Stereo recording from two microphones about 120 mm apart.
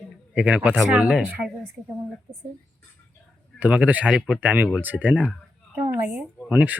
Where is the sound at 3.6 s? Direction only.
10° right (ahead or behind).